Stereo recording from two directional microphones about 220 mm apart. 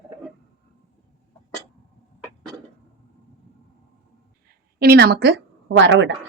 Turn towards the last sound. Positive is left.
turn(degrees=-55)  # may be behind; listen again after turning